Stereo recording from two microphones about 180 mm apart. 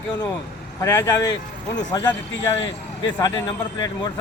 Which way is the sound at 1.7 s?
20° left (ahead or behind).